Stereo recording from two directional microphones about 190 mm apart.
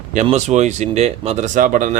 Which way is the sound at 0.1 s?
35° right (ahead or behind).